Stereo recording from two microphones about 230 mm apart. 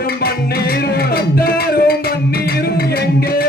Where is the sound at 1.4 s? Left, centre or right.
Left.